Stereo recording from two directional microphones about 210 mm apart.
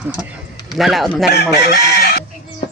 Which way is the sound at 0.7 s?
Centre (ahead or behind).